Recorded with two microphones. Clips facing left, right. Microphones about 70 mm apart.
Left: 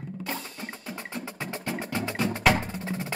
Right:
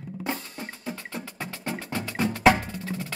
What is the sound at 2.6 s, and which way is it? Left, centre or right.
Percussion, left.